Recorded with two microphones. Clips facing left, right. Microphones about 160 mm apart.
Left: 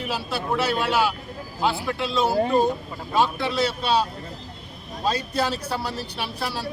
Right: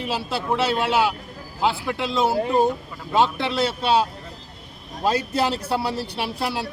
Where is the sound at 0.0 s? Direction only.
20° right (ahead or behind).